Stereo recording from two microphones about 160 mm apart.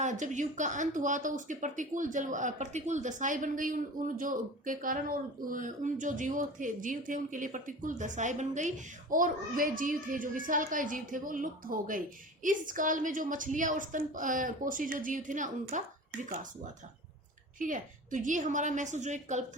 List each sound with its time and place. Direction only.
0.0 s speech: 50° right (ahead or behind)
17.6 s a woman's voice: 55° right (ahead or behind)